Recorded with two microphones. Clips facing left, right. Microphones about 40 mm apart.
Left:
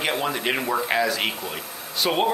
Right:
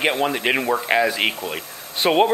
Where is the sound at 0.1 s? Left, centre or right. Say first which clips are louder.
Right 4 dB; centre.